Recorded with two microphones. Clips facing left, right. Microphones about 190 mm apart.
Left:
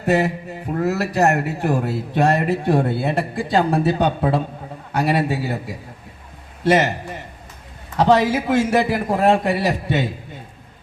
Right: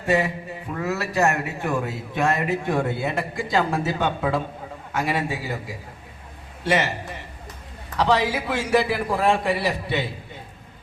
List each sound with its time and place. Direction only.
0.0 s mantra: 40° left (ahead or behind)
0.7 s a man's voice: 40° left (ahead or behind)
6.7 s a man's voice: 40° left (ahead or behind)